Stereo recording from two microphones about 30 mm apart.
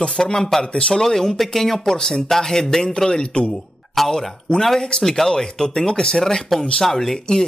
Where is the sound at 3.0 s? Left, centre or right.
Left.